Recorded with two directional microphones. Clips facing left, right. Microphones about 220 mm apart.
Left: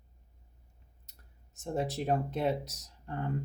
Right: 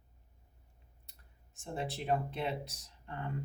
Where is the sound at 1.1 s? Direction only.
40° left (ahead or behind).